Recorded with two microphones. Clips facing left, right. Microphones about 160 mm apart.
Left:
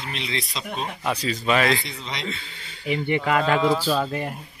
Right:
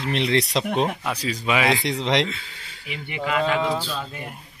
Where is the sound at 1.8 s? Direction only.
80° right.